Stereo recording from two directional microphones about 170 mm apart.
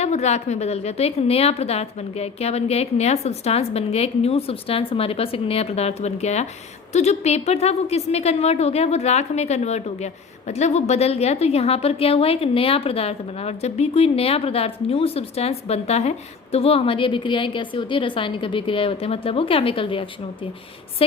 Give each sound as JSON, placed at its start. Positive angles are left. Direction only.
{"t": 0.0, "sound": "a woman's voice", "side_deg": 40}